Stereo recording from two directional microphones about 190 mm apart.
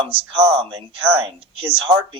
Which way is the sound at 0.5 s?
30° right (ahead or behind).